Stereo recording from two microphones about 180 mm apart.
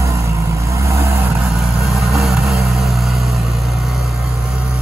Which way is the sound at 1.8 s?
Centre (ahead or behind).